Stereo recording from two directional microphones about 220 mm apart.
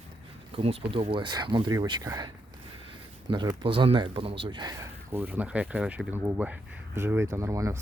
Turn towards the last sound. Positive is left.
turn(degrees=-15)  # may be behind; listen again after turning